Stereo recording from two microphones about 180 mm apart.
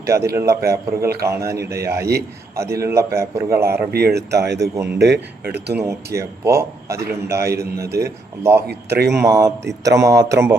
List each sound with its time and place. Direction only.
0.0 s a man's voice: 15° right (ahead or behind)
3.9 s speech: 65° right (ahead or behind)
4.6 s a man's voice: 15° right (ahead or behind)
4.9 s speech: 65° right (ahead or behind)
5.7 s a man's voice: 15° right (ahead or behind)
7.5 s speech: 60° right (ahead or behind)
9.2 s a man's voice: 20° right (ahead or behind)